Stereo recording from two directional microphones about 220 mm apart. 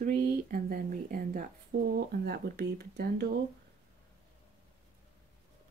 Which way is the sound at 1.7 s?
50° right (ahead or behind).